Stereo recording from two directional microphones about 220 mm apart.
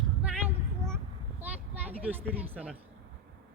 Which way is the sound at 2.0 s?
10° right (ahead or behind).